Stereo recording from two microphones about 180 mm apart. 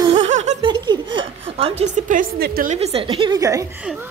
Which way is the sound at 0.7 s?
25° right (ahead or behind).